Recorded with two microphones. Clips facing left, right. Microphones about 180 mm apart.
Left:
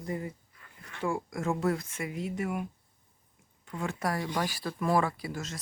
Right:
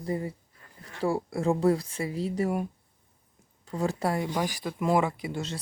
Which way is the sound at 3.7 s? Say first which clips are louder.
Right 5 dB; 35° right (ahead or behind).